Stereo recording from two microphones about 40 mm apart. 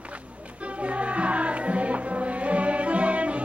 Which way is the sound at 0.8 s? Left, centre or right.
Right.